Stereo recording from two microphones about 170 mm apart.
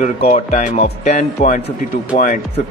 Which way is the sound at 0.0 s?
45° left (ahead or behind).